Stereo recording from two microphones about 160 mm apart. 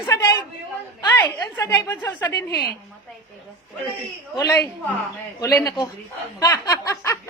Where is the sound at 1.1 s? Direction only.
15° left (ahead or behind).